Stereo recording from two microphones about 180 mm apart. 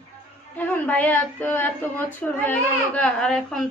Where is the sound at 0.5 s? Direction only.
10° left (ahead or behind).